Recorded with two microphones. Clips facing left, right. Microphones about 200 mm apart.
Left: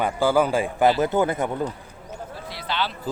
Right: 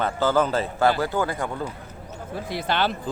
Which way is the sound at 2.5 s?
50° right (ahead or behind).